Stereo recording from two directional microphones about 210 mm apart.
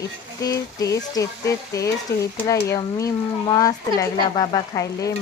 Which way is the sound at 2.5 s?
15° left (ahead or behind).